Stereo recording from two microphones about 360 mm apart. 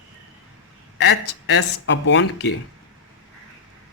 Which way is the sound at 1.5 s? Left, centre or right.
Left.